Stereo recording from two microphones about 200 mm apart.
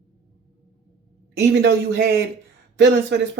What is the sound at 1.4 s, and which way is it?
Speech, 55° right (ahead or behind).